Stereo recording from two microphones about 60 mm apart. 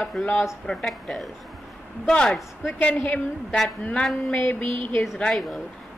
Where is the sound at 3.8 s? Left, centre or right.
Centre.